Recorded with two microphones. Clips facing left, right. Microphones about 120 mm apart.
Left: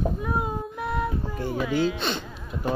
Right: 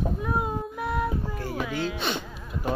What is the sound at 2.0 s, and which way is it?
Speech, 10° right (ahead or behind).